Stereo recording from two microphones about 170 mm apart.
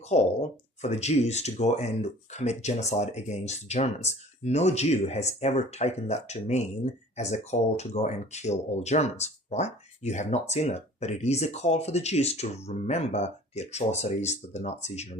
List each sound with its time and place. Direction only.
0.1 s speech: 40° left (ahead or behind)